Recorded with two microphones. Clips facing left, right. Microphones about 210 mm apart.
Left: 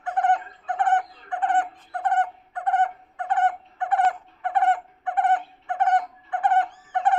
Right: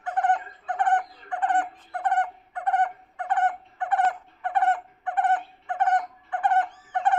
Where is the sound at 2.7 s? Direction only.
20° left (ahead or behind).